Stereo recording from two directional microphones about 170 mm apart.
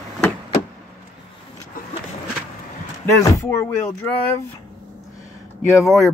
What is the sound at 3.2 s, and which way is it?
Speech, 15° left (ahead or behind).